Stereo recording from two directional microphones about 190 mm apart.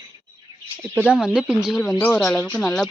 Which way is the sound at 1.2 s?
5° right (ahead or behind).